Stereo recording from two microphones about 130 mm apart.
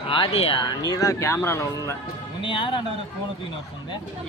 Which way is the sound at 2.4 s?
40° left (ahead or behind).